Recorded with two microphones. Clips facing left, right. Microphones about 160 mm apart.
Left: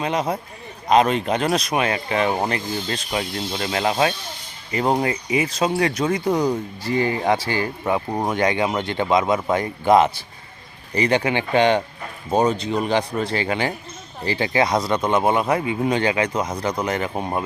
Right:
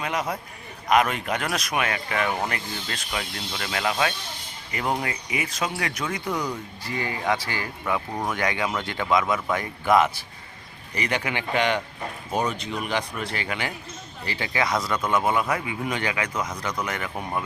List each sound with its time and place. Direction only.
0.0 s speech: 25° left (ahead or behind)